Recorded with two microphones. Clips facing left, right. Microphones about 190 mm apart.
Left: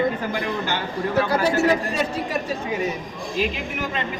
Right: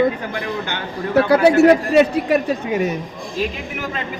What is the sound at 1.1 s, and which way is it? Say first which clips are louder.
Speech: right 8 dB; 65° right (ahead or behind).